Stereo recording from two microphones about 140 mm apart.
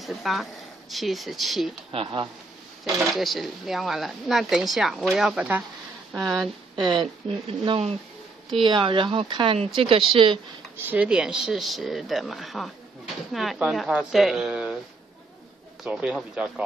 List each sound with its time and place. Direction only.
0.0 s speech: centre (ahead or behind)
1.9 s speech: 40° right (ahead or behind)
3.0 s speech: centre (ahead or behind)
6.8 s speech: 35° right (ahead or behind)
10.9 s speech: 10° right (ahead or behind)
15.8 s speech: 5° right (ahead or behind)